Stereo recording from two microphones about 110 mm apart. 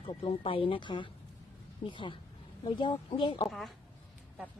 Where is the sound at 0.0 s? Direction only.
50° left (ahead or behind).